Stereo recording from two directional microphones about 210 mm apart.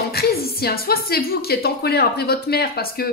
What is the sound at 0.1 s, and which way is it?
A woman's voice, 50° left (ahead or behind).